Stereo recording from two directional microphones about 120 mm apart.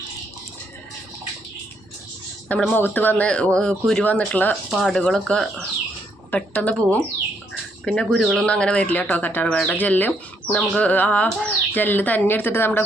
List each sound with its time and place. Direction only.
2.5 s speech: 10° left (ahead or behind)
4.7 s speech: centre (ahead or behind)
7.9 s speech: centre (ahead or behind); by 12.8 s 20° left (ahead or behind)